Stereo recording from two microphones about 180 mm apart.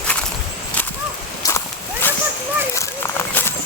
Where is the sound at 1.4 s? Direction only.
20° left (ahead or behind).